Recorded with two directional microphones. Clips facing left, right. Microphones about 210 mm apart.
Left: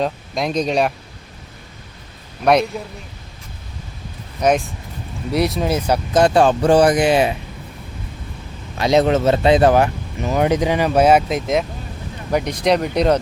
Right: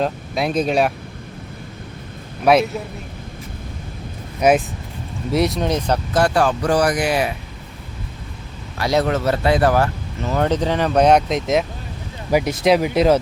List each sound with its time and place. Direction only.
0.0 s speech: 5° right (ahead or behind)
2.4 s speech: 5° right (ahead or behind)
4.4 s speech: 10° right (ahead or behind)
6.1 s speech: 20° left (ahead or behind)
8.8 s speech: 20° left (ahead or behind); by 13.1 s 5° right (ahead or behind)